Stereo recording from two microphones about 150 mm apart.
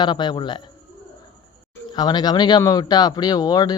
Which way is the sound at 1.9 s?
30° left (ahead or behind).